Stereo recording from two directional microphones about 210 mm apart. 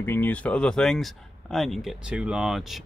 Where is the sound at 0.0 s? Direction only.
10° left (ahead or behind).